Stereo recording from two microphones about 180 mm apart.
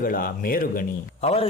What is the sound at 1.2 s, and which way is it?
Speech, 35° left (ahead or behind).